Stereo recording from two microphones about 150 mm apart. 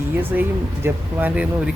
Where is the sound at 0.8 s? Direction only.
10° right (ahead or behind).